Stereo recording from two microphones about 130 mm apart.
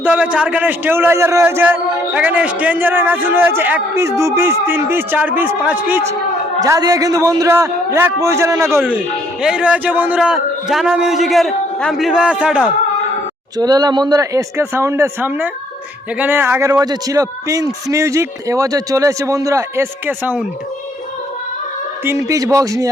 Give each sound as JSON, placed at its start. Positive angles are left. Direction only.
{"t": 0.0, "sound": "a man's voice", "side_deg": -10}
{"t": 6.6, "sound": "a man's voice", "side_deg": -30}
{"t": 13.6, "sound": "a man's voice", "side_deg": -30}
{"t": 22.0, "sound": "a man's voice", "side_deg": -20}